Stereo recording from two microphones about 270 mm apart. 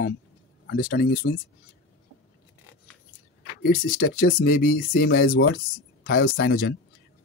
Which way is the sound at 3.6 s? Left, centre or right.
Left.